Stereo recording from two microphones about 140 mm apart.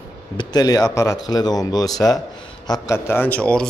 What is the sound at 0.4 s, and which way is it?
Speech, 30° left (ahead or behind).